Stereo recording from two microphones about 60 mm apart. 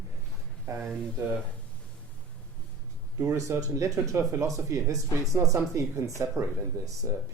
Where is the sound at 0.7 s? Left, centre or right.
Right.